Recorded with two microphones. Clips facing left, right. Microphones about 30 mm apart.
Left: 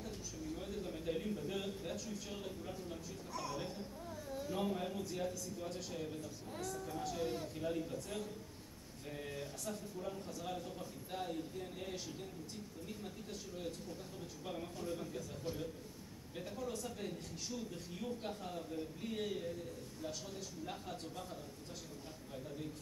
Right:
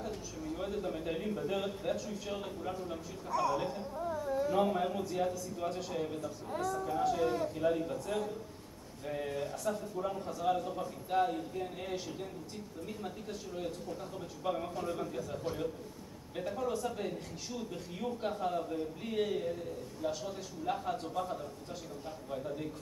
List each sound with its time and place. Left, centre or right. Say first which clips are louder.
0.0 s a man's voice: right 6 dB; centre
3.3 s a man's voice: right 12 dB; centre
5.0 s a man's voice: right 7 dB; centre
10.0 s a man's voice: right 12 dB; right
14.4 s a man's voice: right 9 dB; right
20.6 s a man's voice: right 14 dB; right